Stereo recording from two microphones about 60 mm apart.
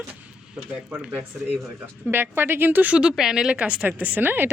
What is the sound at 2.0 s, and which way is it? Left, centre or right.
Speech, right.